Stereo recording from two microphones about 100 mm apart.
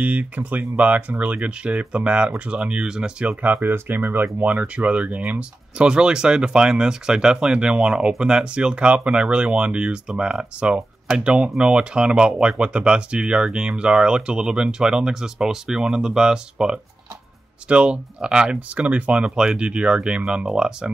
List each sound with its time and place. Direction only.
0.0 s speech: 15° right (ahead or behind)